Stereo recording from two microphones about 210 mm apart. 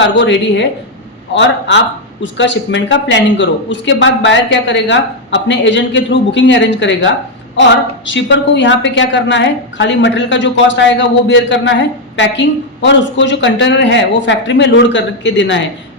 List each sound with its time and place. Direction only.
0.1 s a woman's voice: 60° left (ahead or behind)